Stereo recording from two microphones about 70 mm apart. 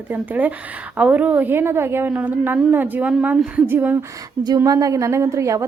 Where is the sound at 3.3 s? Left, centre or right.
Centre.